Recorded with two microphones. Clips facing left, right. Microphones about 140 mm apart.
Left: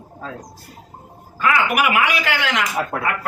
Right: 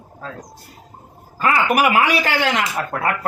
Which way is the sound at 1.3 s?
35° right (ahead or behind).